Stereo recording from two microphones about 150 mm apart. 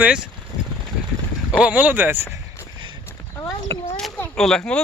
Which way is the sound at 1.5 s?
10° right (ahead or behind).